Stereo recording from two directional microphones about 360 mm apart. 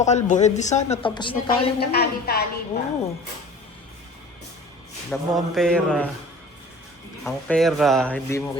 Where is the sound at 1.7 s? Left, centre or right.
Left.